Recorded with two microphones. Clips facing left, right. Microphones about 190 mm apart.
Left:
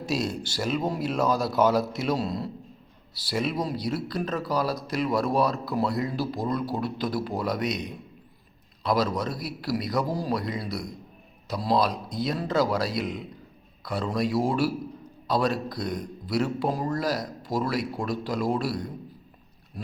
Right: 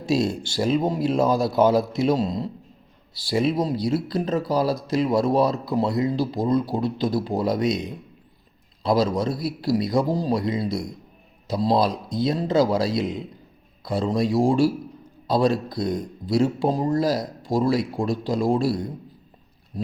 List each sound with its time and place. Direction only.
0.3 s speech: 25° right (ahead or behind)
8.8 s speech: 25° right (ahead or behind)